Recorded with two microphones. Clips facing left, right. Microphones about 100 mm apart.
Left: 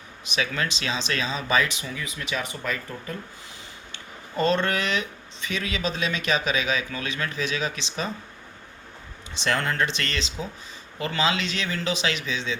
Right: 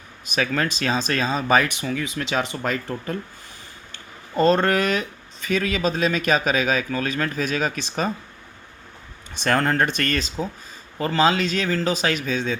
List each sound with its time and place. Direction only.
0.3 s speech: 45° right (ahead or behind); by 2.6 s 70° right (ahead or behind)
3.9 s speech: 40° right (ahead or behind)
9.3 s speech: 50° right (ahead or behind)